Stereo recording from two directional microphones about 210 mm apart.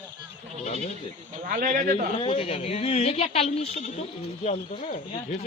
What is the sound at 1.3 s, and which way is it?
Speech, 40° right (ahead or behind).